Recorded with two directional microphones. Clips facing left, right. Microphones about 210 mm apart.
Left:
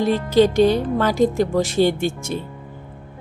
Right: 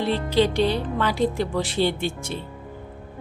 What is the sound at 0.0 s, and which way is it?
Speech, 45° left (ahead or behind).